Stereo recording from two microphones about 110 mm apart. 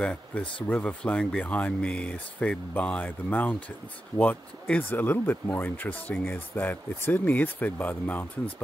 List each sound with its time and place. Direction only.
0.0 s speech: 10° left (ahead or behind)